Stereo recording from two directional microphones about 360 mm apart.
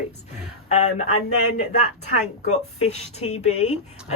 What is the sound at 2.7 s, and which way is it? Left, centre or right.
A woman's voice, centre.